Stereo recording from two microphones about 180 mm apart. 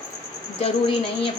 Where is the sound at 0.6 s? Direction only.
30° left (ahead or behind).